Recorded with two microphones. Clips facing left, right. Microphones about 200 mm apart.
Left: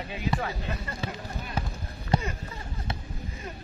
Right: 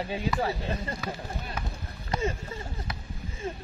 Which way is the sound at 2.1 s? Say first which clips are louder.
Left 1 dB; 30° left (ahead or behind).